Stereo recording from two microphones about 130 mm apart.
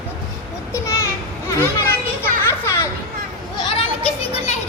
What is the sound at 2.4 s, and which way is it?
Children playing, 20° left (ahead or behind).